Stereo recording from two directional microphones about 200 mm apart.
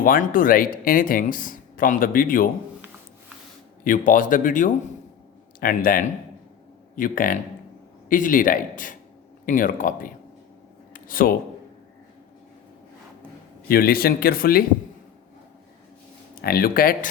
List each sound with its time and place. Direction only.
0.0 s speech: 45° left (ahead or behind)
3.8 s speech: 40° left (ahead or behind)
10.9 s a sound: 45° left (ahead or behind)
13.7 s speech: 50° left (ahead or behind)
16.4 s speech: 50° left (ahead or behind)